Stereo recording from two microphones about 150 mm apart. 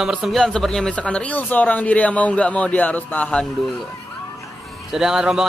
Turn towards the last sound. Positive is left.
turn(degrees=-5)  # may be behind; listen again after turning